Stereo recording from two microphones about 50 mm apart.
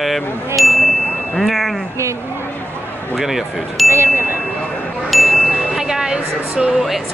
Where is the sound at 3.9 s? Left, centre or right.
Right.